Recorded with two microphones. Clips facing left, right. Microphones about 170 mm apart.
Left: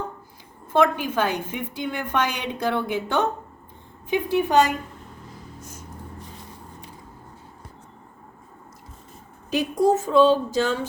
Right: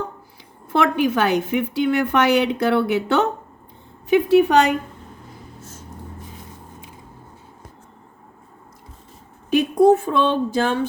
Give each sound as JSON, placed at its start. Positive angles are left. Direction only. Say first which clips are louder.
{"t": 0.7, "sound": "a woman's voice", "louder": "right 2 dB", "side_deg": -75}
{"t": 9.5, "sound": "speech", "louder": "right 6 dB", "side_deg": -60}